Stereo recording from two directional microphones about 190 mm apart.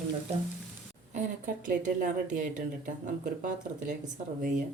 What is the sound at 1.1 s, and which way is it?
Speech, 40° right (ahead or behind).